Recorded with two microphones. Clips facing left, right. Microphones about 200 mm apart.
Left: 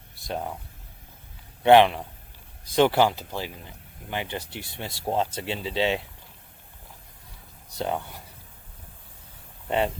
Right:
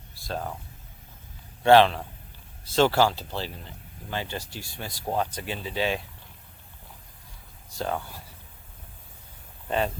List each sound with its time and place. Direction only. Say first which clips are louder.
0.3 s speech: left 1 dB; 20° left (ahead or behind)
1.6 s speech: left 1 dB; 15° left (ahead or behind)
7.8 s speech: left 1 dB; 20° left (ahead or behind)
9.6 s speech: left 2 dB; 20° left (ahead or behind)